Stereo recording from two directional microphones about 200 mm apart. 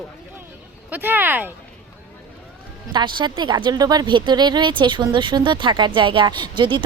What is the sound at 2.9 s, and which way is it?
Speech, 20° right (ahead or behind).